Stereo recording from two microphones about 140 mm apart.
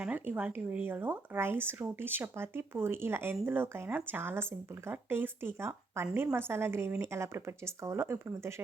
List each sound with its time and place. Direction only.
0.0 s speech: 10° right (ahead or behind)